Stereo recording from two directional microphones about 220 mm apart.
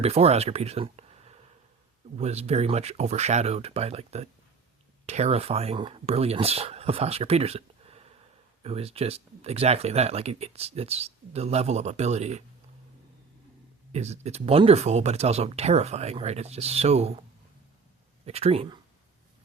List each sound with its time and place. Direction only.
0.0 s speech: 30° right (ahead or behind)
13.9 s speech: 30° right (ahead or behind)
18.3 s speech: 30° right (ahead or behind)